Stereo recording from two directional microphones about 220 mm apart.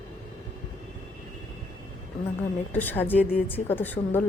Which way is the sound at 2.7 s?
10° left (ahead or behind).